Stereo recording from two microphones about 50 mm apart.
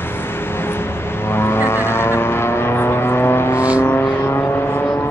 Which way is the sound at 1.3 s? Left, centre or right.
Left.